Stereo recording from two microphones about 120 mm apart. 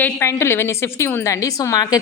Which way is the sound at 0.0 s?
20° left (ahead or behind).